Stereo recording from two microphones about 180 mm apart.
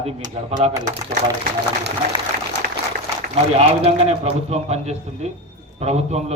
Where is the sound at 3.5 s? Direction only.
35° right (ahead or behind).